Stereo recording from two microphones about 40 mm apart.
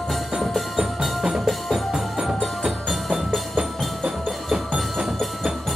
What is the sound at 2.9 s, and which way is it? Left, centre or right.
Music, centre.